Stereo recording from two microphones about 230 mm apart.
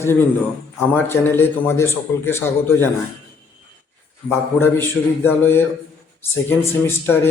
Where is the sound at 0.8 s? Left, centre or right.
Centre.